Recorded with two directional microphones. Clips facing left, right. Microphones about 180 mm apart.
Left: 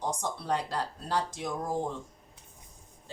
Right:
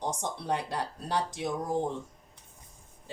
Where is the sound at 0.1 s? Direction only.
20° right (ahead or behind).